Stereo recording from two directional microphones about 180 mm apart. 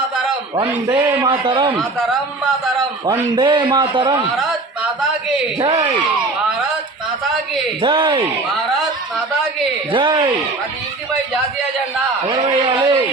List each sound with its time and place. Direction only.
0.5 s a man's voice: 15° right (ahead or behind)
3.1 s a man's voice: 25° right (ahead or behind)
5.5 s a man's voice: 30° right (ahead or behind)
7.8 s a man's voice: 30° right (ahead or behind)
9.9 s a man's voice: 25° right (ahead or behind)
12.4 s a man's voice: 25° right (ahead or behind)